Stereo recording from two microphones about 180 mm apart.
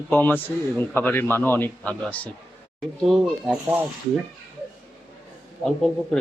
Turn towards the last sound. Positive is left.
turn(degrees=5)  # may be behind; listen again after turning